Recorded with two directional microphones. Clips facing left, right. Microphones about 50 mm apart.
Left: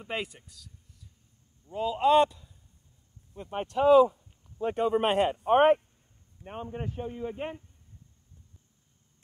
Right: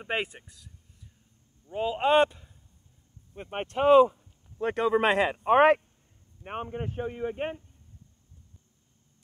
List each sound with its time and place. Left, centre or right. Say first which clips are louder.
0.0 s a man's voice: right 4 dB; right
1.7 s a man's voice: left 1 dB; right
6.4 s speech: right 3 dB; right